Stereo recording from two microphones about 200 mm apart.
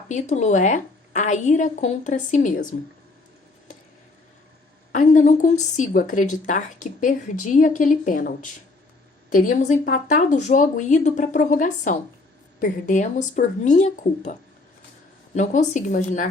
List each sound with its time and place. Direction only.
0.1 s speech: 35° left (ahead or behind)
4.9 s speech: 40° left (ahead or behind)
9.3 s speech: 40° left (ahead or behind)
15.4 s speech: 40° left (ahead or behind)